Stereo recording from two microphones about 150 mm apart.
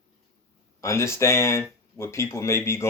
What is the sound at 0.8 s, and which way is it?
Speech, 20° left (ahead or behind).